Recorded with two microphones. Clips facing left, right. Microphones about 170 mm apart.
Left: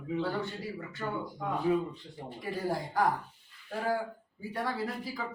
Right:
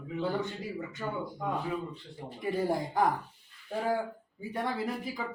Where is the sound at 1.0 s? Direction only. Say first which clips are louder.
Left 1 dB; 10° right (ahead or behind).